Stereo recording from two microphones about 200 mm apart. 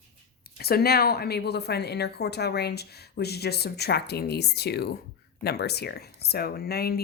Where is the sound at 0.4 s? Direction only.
50° left (ahead or behind).